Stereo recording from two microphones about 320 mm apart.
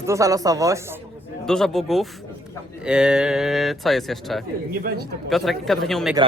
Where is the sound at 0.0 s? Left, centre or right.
Centre.